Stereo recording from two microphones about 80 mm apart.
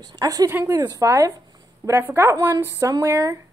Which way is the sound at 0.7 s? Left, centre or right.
Right.